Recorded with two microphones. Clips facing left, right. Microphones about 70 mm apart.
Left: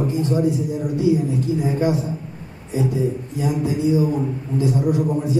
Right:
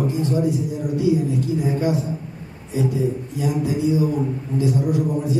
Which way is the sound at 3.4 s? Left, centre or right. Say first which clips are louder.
Left 1 dB; left.